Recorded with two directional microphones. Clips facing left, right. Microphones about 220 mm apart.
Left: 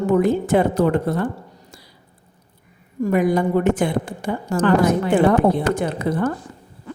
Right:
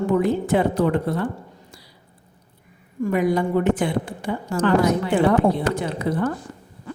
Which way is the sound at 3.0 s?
45° left (ahead or behind).